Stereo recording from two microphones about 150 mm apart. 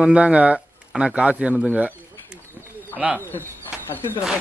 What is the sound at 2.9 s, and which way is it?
Speech, 5° right (ahead or behind).